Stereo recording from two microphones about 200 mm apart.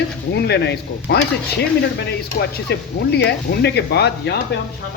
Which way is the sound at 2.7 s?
55° left (ahead or behind).